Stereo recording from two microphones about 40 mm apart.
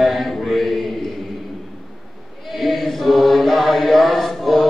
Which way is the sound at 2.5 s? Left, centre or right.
Centre.